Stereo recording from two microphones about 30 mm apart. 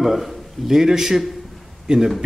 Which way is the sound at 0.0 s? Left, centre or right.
Centre.